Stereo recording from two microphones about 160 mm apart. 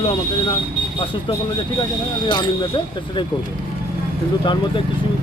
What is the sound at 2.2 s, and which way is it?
Speech, 30° left (ahead or behind).